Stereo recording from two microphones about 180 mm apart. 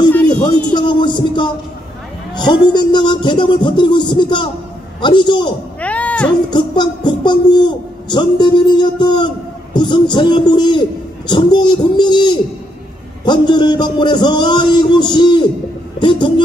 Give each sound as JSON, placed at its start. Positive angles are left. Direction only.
{"t": 0.7, "sound": "a man's voice", "side_deg": 25}
{"t": 5.8, "sound": "a sound", "side_deg": 10}
{"t": 6.5, "sound": "a man's voice", "side_deg": 25}